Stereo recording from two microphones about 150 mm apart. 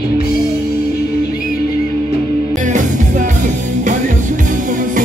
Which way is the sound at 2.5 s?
55° right (ahead or behind).